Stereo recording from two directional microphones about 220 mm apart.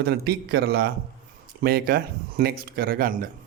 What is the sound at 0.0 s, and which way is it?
A man's voice, 45° right (ahead or behind).